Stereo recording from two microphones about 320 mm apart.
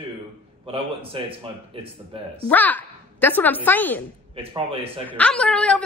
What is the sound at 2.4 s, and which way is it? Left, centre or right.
A woman's voice, centre.